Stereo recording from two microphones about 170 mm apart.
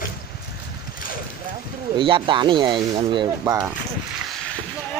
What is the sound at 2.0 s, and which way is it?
Speech, 30° right (ahead or behind).